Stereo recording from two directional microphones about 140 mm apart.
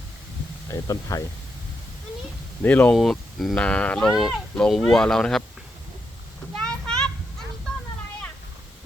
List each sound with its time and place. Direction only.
0.7 s speech: 25° left (ahead or behind)
2.6 s speech: 10° left (ahead or behind)
6.6 s children playing: 5° left (ahead or behind)